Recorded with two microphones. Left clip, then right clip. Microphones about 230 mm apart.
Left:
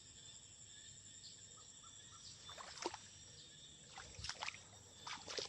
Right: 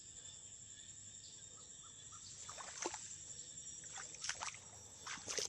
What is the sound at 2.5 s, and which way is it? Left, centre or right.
Rowboat, centre.